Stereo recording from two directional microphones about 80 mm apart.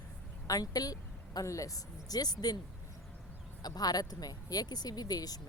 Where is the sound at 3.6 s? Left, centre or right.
Left.